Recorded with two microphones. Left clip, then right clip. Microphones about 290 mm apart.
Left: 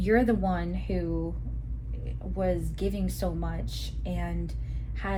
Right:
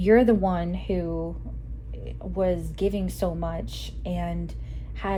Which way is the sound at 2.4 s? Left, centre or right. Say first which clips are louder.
Right 5 dB; right.